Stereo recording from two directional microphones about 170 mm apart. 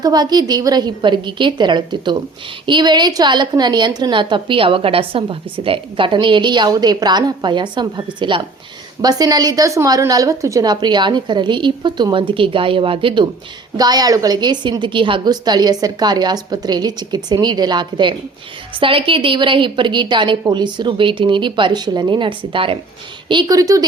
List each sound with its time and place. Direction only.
0.0 s a woman's voice: 25° right (ahead or behind)